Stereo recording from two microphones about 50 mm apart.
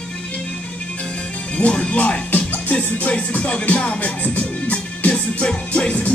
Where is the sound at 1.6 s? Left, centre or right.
Left.